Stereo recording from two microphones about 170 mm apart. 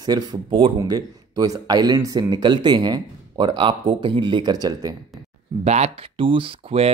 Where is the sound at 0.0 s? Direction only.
25° right (ahead or behind).